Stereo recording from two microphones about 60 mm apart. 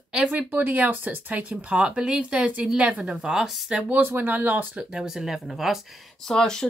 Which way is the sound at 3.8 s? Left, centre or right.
Right.